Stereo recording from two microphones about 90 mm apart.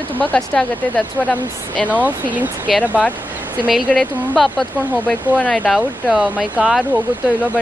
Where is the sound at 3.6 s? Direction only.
Centre (ahead or behind).